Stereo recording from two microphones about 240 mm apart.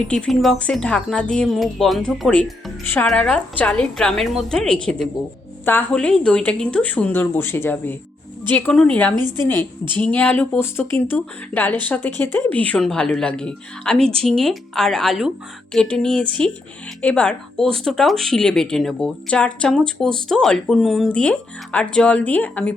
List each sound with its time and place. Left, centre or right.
0.1 s speech: centre
9.1 s a woman's voice: centre
10.0 s speech: centre